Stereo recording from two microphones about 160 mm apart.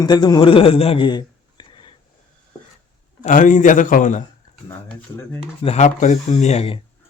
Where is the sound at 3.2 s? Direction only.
55° left (ahead or behind).